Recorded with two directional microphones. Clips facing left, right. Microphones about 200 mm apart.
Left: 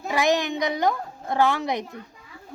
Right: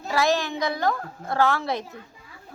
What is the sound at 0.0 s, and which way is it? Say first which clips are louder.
A woman's voice: left 1 dB; 15° left (ahead or behind).